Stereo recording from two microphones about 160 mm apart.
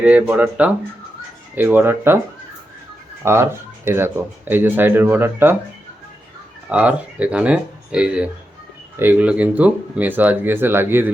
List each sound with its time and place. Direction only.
0.0 s speech: 10° right (ahead or behind)
3.2 s speech: 15° right (ahead or behind)
6.7 s speech: 10° right (ahead or behind)